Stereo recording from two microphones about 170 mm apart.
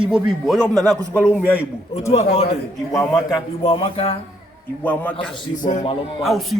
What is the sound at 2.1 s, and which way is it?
Speech, 40° left (ahead or behind).